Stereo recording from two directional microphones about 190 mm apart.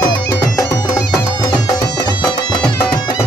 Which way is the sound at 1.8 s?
20° left (ahead or behind).